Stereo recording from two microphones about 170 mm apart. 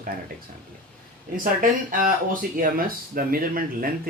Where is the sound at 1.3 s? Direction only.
55° right (ahead or behind).